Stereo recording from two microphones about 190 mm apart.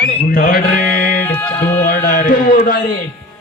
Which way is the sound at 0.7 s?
10° left (ahead or behind).